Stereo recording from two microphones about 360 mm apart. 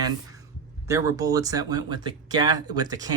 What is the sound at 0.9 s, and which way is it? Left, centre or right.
Speech, centre.